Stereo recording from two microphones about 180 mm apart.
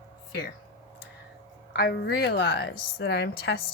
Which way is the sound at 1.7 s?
60° left (ahead or behind).